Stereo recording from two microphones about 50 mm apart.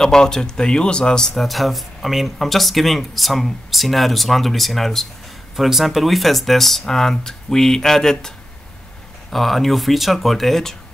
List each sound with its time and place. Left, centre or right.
0.0 s speech: centre
1.3 s speech: centre
9.3 s speech: centre